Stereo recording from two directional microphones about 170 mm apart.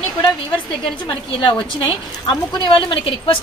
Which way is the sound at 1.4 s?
30° left (ahead or behind).